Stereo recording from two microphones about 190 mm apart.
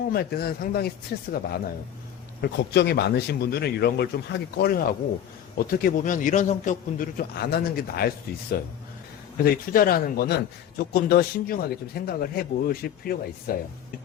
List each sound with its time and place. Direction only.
0.1 s a man's voice: 55° left (ahead or behind)